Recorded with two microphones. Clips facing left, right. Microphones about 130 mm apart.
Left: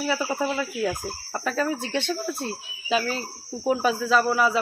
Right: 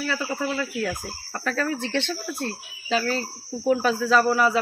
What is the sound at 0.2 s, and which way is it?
Speech, 25° left (ahead or behind).